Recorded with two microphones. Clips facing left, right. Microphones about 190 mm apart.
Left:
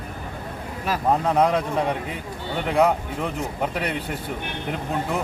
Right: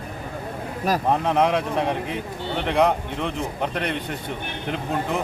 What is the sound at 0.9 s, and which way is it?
Speech, 40° right (ahead or behind).